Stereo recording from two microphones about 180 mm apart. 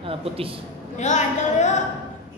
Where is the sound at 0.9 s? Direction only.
40° left (ahead or behind).